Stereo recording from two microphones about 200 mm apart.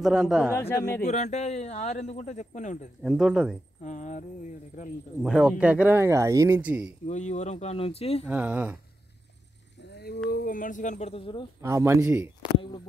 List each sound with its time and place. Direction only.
0.0 s speech: 5° right (ahead or behind)
0.5 s speech: 10° left (ahead or behind)
1.0 s speech: 35° left (ahead or behind)
3.0 s speech: centre (ahead or behind)
3.8 s speech: 35° left (ahead or behind)
5.2 s speech: 5° right (ahead or behind)
7.1 s speech: 35° left (ahead or behind)
8.3 s speech: 5° right (ahead or behind)
9.8 s a sound: 55° left (ahead or behind)
10.3 s speech: 45° left (ahead or behind); by 11.4 s 25° left (ahead or behind)
11.6 s speech: 15° right (ahead or behind)